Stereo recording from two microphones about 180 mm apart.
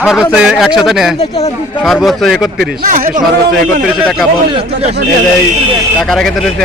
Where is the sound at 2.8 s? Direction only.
50° right (ahead or behind).